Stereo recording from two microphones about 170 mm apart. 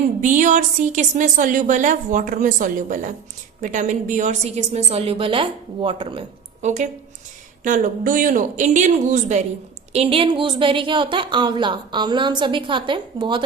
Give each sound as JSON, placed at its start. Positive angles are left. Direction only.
{"t": 0.2, "sound": "a woman's voice", "side_deg": -50}
{"t": 9.9, "sound": "a woman's voice", "side_deg": -35}